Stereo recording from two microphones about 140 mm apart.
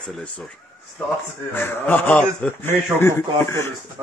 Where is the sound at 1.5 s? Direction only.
15° left (ahead or behind).